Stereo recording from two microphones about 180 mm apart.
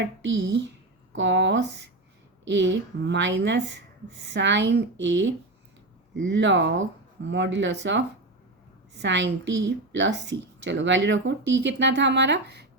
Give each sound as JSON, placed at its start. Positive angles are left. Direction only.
{"t": 0.0, "sound": "a woman's voice", "side_deg": -85}